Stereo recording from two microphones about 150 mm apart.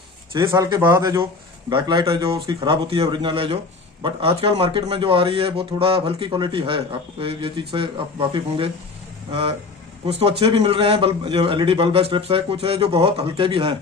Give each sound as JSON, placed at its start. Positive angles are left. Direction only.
{"t": 0.5, "sound": "a man's voice", "side_deg": -25}
{"t": 10.1, "sound": "a man's voice", "side_deg": -40}